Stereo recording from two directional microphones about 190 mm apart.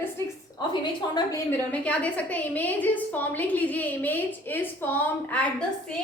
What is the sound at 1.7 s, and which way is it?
A woman's voice, 5° left (ahead or behind).